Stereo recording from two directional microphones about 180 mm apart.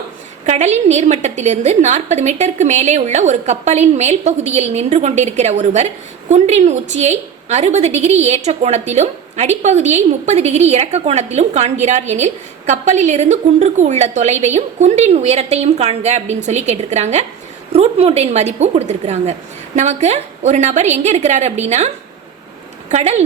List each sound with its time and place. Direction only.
0.4 s a woman's voice: 40° right (ahead or behind)